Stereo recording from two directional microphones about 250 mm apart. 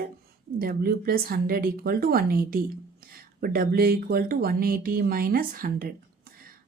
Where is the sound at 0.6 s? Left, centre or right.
Right.